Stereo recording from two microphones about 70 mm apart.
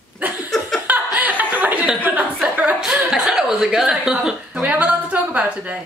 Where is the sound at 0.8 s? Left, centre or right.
Right.